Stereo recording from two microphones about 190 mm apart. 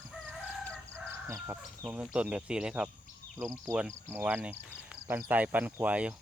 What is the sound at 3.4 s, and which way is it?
Speech, 15° right (ahead or behind).